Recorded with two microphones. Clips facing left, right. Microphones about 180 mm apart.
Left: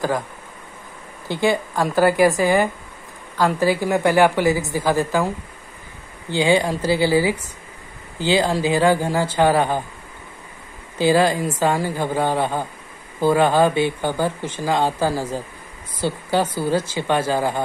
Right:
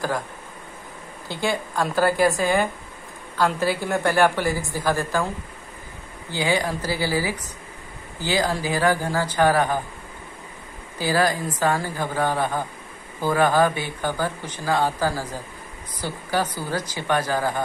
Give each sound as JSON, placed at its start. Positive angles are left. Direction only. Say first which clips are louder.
{"t": 1.3, "sound": "speech", "louder": "left 6 dB", "side_deg": 55}
{"t": 1.8, "sound": "speech", "louder": "left 3 dB", "side_deg": 15}
{"t": 6.3, "sound": "speech", "louder": "left 6 dB", "side_deg": 20}
{"t": 11.0, "sound": "speech", "louder": "left 5 dB", "side_deg": 20}